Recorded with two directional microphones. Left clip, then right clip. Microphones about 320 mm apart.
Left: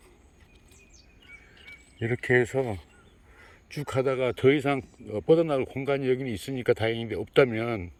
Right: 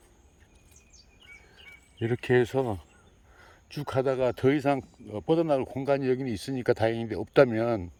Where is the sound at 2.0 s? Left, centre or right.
Centre.